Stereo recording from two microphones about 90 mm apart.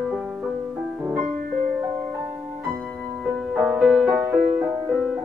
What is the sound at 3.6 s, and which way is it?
Music, 15° right (ahead or behind).